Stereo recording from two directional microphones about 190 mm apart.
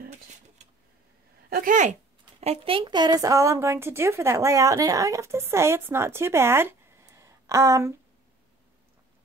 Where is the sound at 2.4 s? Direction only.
30° right (ahead or behind); by 7.9 s 15° right (ahead or behind).